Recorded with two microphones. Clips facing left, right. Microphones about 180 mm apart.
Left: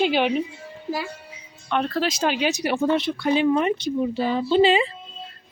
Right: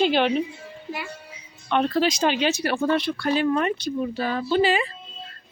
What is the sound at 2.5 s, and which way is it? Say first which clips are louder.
A woman's voice: left 1 dB; 15° left (ahead or behind).